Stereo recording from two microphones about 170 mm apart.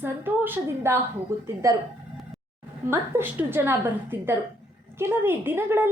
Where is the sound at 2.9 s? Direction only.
15° right (ahead or behind).